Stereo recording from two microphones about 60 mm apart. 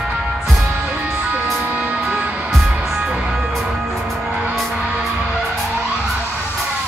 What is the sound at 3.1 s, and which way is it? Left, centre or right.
Music, centre.